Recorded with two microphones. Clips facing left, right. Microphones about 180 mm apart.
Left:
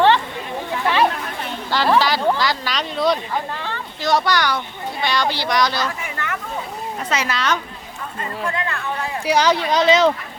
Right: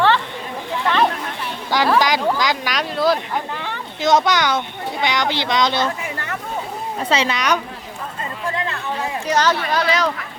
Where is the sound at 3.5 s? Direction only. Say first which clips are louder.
Right 1 dB; 15° right (ahead or behind).